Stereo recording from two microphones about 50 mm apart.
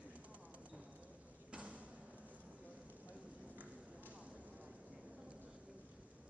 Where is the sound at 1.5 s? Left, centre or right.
Right.